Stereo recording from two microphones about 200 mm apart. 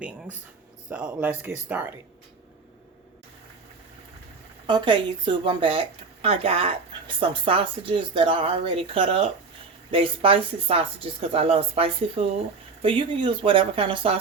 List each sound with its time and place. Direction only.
0.9 s speech: 5° right (ahead or behind)
4.6 s speech: 25° right (ahead or behind)